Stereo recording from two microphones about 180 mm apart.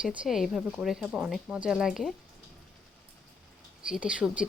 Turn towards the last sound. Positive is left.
turn(degrees=-5)  # may be behind; listen again after turning